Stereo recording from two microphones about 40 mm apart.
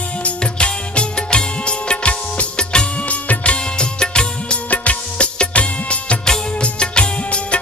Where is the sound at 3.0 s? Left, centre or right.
Left.